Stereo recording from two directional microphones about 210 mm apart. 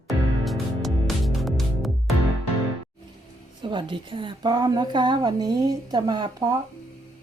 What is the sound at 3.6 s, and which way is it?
A woman's voice, 25° right (ahead or behind).